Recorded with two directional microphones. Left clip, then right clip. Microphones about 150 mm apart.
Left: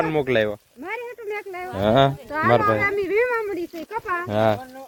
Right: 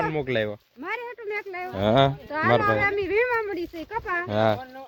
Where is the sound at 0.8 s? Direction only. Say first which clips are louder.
Left 1 dB; 30° right (ahead or behind).